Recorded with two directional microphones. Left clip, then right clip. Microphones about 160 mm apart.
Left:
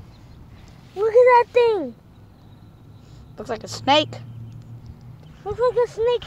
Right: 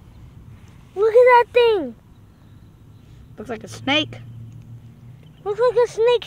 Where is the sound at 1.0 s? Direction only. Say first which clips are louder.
Right 1 dB; 25° right (ahead or behind).